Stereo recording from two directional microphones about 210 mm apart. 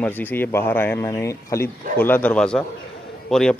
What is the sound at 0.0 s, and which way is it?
Speech, 10° left (ahead or behind).